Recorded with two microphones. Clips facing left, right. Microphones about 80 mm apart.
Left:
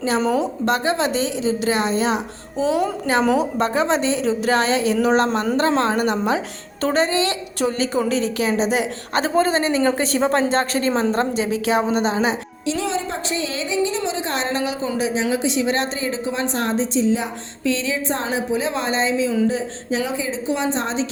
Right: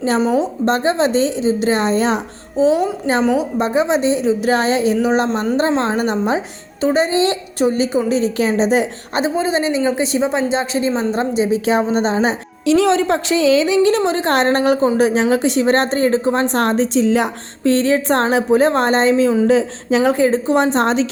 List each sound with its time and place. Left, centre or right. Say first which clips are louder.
0.3 s a woman's voice: right 3 dB; right
2.6 s a woman's voice: right 5 dB; right
5.5 s a woman's voice: right 1 dB; right
6.8 s a woman's voice: right 3 dB; centre
7.1 s a woman's voice: right 5 dB; right
9.3 s a woman's voice: left 1 dB; centre; by 12.4 s right
12.6 s a woman's voice: right 10 dB; right
17.6 s a woman's voice: right 8 dB; right
19.5 s a woman's voice: right 8 dB; right